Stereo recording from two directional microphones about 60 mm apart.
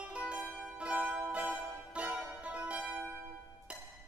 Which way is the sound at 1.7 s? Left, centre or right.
Centre.